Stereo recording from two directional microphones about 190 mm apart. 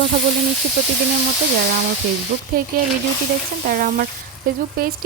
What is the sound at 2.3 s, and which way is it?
Speech, 40° right (ahead or behind).